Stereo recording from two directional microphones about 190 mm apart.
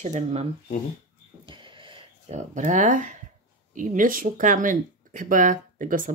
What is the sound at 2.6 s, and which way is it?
A woman's voice, 40° right (ahead or behind).